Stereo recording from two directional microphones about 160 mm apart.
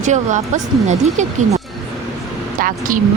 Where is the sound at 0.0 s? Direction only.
50° right (ahead or behind).